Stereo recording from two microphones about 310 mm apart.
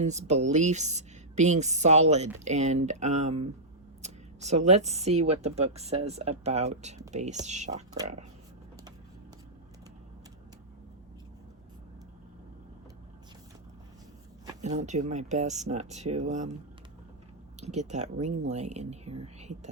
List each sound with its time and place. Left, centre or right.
0.0 s a woman's voice: right
14.4 s a woman's voice: right
17.6 s a woman's voice: right